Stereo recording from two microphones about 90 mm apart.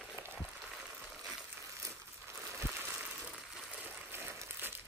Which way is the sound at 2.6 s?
25° right (ahead or behind).